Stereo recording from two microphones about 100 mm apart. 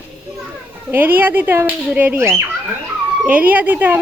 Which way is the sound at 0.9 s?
20° right (ahead or behind).